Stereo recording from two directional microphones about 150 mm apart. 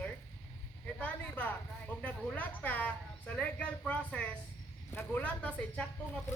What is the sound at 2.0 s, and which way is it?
Speech, 10° left (ahead or behind).